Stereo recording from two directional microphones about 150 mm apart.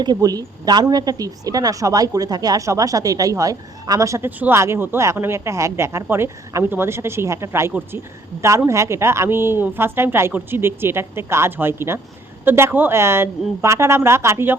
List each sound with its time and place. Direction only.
0.0 s a woman's voice: 25° right (ahead or behind)